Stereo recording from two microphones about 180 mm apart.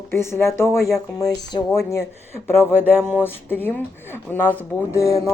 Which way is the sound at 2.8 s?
5° right (ahead or behind).